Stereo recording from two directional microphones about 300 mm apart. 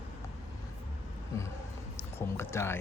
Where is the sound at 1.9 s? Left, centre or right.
Centre.